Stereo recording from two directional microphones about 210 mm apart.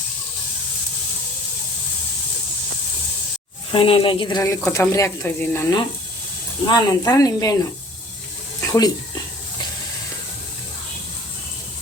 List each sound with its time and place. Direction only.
3.7 s speech: 25° left (ahead or behind)
6.7 s speech: 15° left (ahead or behind)
8.6 s a sound: 15° left (ahead or behind)